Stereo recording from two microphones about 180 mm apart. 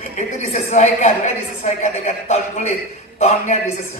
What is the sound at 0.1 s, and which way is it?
A woman's voice, 40° left (ahead or behind).